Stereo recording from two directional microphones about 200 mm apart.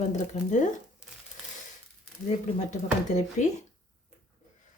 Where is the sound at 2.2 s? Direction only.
35° left (ahead or behind).